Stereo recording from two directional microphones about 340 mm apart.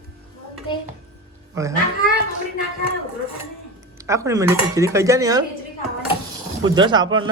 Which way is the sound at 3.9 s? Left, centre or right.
Centre.